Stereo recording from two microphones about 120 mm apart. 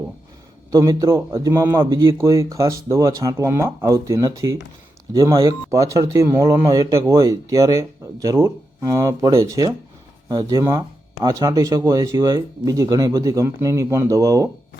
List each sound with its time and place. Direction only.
0.7 s speech: 25° right (ahead or behind)
10.2 s speech: 35° right (ahead or behind)